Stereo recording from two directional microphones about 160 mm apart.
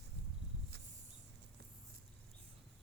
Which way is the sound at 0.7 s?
90° right.